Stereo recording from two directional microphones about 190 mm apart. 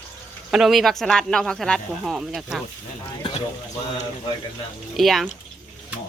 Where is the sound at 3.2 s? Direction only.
25° left (ahead or behind).